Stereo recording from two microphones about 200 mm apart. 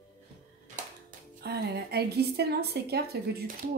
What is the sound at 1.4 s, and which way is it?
A woman's voice, 55° right (ahead or behind).